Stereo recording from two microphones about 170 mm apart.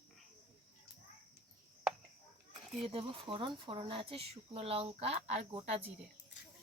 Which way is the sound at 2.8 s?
35° right (ahead or behind).